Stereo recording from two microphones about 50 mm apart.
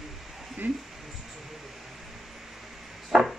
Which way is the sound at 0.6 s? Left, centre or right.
Right.